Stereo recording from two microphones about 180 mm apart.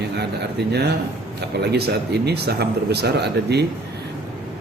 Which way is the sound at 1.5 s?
65° right (ahead or behind).